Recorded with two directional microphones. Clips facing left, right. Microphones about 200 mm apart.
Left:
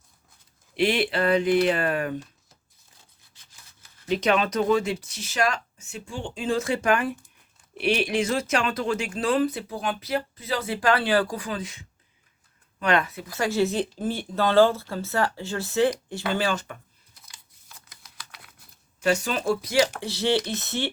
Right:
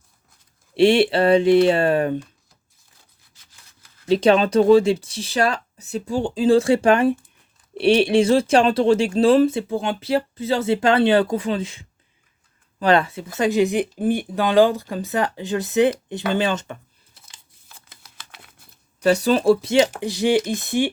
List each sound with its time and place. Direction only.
0.8 s speech: 30° right (ahead or behind)
4.0 s speech: 30° right (ahead or behind)
17.2 s crumpling: 25° right (ahead or behind)
18.9 s speech: 35° right (ahead or behind); by 20.9 s 15° right (ahead or behind)